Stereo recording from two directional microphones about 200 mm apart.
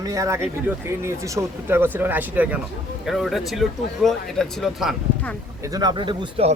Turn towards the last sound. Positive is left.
turn(degrees=-25)  # may be behind; listen again after turning